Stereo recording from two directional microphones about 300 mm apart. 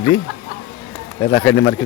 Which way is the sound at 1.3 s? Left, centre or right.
Centre.